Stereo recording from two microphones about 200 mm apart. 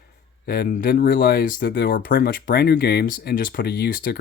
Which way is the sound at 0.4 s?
50° left (ahead or behind).